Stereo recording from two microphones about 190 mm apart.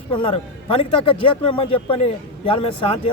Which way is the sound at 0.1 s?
30° left (ahead or behind).